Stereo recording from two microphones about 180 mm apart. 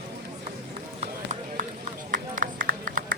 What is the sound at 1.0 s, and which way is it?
Run, 40° right (ahead or behind).